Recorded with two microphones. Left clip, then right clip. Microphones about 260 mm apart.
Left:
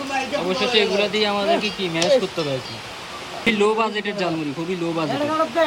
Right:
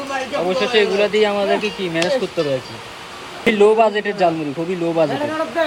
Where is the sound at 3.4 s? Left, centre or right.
Centre.